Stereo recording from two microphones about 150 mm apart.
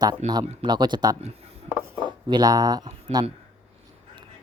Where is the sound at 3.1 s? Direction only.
45° right (ahead or behind).